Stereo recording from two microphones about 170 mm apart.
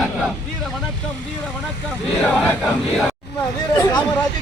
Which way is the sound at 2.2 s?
5° left (ahead or behind).